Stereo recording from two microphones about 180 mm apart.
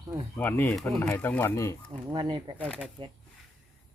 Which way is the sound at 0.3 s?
10° left (ahead or behind).